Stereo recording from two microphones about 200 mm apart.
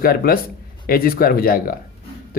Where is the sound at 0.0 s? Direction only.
45° left (ahead or behind).